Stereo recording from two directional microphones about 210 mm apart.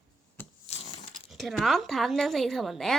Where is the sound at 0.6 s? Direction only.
30° left (ahead or behind).